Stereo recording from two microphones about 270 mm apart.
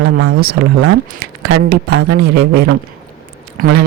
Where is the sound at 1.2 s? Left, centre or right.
Right.